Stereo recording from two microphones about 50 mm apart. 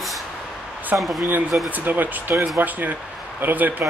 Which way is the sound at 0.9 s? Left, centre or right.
Right.